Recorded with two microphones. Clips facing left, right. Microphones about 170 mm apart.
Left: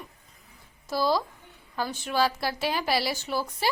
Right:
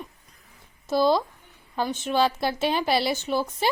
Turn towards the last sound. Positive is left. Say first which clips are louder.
# right 4 dB
turn(degrees=-20)  # may be behind; listen again after turning